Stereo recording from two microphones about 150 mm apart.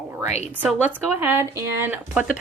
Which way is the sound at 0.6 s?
10° right (ahead or behind).